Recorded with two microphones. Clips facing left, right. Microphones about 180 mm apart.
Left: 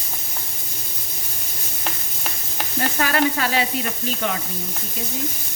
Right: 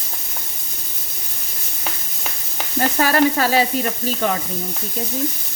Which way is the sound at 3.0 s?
40° right (ahead or behind).